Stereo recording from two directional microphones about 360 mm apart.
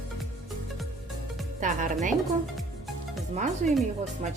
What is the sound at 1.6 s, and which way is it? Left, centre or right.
Speech, right.